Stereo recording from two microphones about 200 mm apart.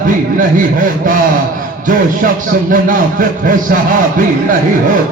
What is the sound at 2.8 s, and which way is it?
Speech, 40° right (ahead or behind).